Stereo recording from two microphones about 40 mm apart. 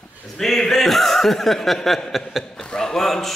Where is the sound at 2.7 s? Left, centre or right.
Centre.